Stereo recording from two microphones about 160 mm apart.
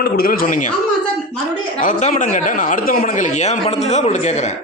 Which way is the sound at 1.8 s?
50° left (ahead or behind).